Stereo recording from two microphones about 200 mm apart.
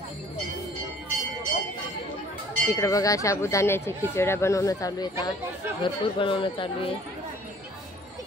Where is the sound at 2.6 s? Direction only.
15° left (ahead or behind).